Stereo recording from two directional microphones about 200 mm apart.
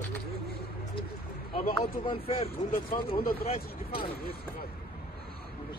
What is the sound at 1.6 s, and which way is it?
Speech, 25° left (ahead or behind).